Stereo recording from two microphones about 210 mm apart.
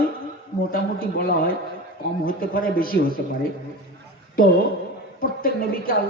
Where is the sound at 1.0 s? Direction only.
45° left (ahead or behind).